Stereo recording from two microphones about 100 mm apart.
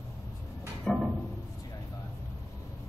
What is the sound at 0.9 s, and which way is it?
Music, 5° left (ahead or behind).